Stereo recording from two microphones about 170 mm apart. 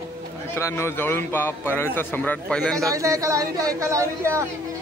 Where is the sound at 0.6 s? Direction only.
15° left (ahead or behind).